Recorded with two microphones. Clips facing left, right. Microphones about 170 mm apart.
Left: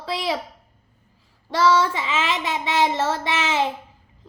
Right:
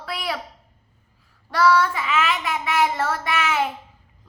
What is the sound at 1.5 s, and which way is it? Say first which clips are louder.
Child singing: even; 25° left (ahead or behind).